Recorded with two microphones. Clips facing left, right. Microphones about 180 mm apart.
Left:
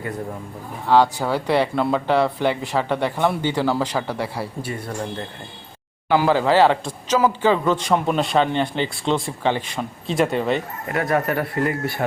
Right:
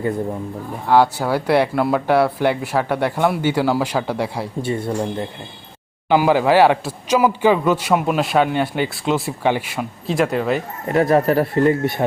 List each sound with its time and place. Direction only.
0.9 s a man's voice: 10° right (ahead or behind)
4.6 s speech: 25° right (ahead or behind)
6.1 s a man's voice: 15° right (ahead or behind)
10.8 s speech: 30° right (ahead or behind)